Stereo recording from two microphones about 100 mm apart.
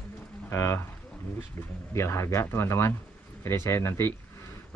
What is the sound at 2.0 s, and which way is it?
Speech, 25° left (ahead or behind).